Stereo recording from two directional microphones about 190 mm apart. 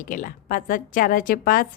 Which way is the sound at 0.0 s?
45° left (ahead or behind).